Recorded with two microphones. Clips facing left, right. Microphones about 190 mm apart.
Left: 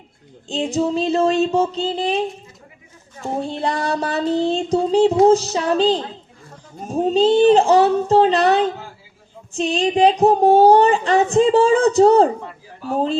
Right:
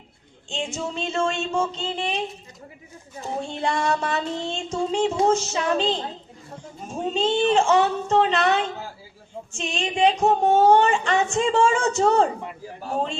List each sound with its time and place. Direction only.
0.4 s speech: 35° left (ahead or behind)
3.2 s speech: 35° left (ahead or behind)